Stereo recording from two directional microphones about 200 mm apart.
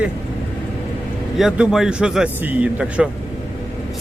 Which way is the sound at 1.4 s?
5° right (ahead or behind).